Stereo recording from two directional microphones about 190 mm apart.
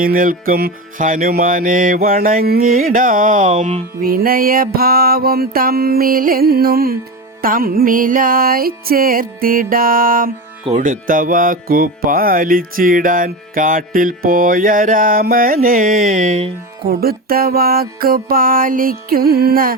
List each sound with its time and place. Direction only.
0.0 s music: 50° right (ahead or behind)
16.8 s music: 50° right (ahead or behind)